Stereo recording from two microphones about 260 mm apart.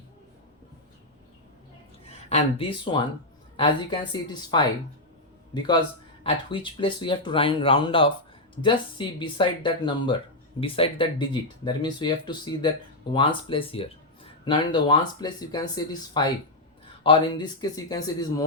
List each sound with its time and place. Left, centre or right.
2.0 s speech: left
6.2 s speech: centre